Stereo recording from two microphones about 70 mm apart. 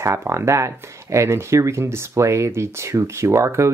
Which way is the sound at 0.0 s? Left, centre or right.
Right.